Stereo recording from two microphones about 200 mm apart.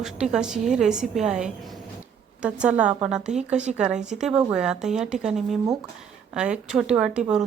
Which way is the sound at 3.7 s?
5° right (ahead or behind).